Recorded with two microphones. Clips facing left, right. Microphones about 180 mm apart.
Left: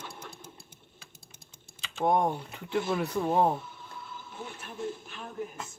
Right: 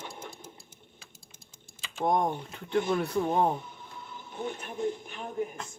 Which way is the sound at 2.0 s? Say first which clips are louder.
Left 1 dB; 5° left (ahead or behind).